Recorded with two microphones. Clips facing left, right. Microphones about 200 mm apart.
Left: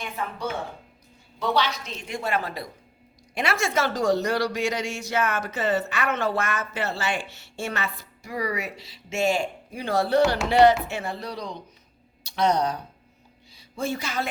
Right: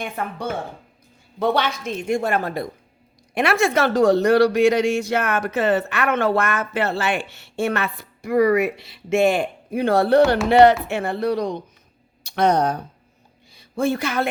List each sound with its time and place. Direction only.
0.0 s a woman's voice: 55° right (ahead or behind)